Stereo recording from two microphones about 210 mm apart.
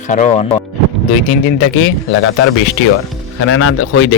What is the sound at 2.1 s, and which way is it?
Speech, 75° left (ahead or behind).